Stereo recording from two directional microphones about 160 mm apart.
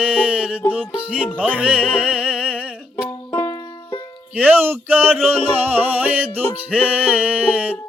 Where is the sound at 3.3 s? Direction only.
25° left (ahead or behind).